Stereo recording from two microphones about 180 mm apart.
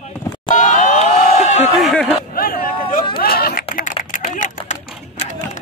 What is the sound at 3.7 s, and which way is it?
Typing, 50° left (ahead or behind).